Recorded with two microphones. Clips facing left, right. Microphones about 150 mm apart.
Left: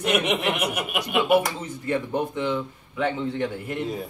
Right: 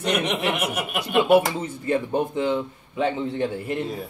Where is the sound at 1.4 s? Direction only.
25° right (ahead or behind).